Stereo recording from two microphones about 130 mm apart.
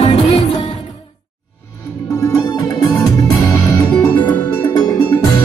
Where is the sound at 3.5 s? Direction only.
25° left (ahead or behind).